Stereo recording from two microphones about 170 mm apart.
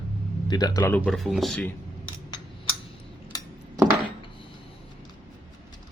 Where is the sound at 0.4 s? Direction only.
25° left (ahead or behind); by 1.6 s centre (ahead or behind).